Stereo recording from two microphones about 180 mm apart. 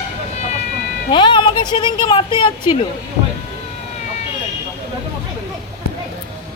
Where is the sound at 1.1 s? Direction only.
25° left (ahead or behind).